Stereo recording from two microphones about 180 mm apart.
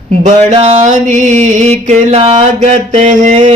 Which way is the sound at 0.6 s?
40° right (ahead or behind).